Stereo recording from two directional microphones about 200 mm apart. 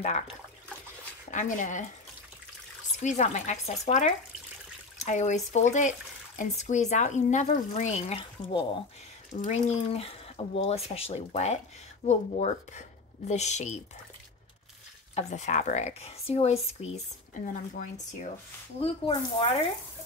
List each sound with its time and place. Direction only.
0.0 s speech: 30° left (ahead or behind)
3.0 s speech: 35° left (ahead or behind)
15.1 s speech: 35° left (ahead or behind)